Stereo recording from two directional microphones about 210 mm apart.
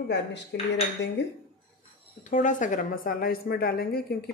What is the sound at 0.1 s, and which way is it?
Dishes, 55° left (ahead or behind).